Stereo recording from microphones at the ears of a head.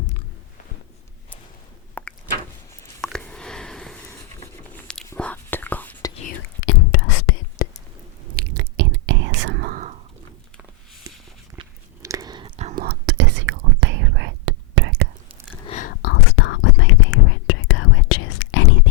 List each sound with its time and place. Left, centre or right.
3.0 s a sound: centre
4.7 s whispering: centre
6.1 s whispering: left
8.3 s whispering: right
12.0 s whispering: right
15.6 s whispering: left